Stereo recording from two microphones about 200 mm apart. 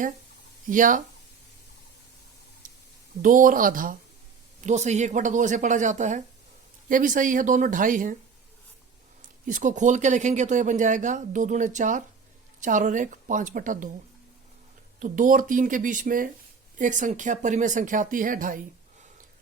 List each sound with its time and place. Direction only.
0.7 s speech: 40° right (ahead or behind)
3.2 s speech: 40° right (ahead or behind)
9.5 s speech: 40° right (ahead or behind)
14.9 s speech: 40° right (ahead or behind)